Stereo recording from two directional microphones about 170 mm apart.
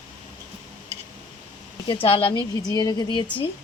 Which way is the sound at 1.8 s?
30° left (ahead or behind).